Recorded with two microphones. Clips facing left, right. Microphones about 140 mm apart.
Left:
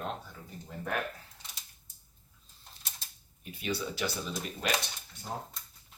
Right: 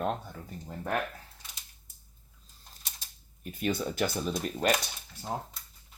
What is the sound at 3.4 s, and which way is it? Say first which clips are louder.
Speech: right 4 dB; 45° right (ahead or behind).